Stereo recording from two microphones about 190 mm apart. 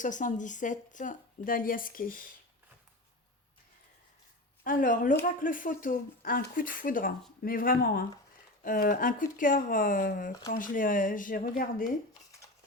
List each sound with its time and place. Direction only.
0.0 s a woman's voice: 40° left (ahead or behind)
4.6 s a woman's voice: 45° left (ahead or behind)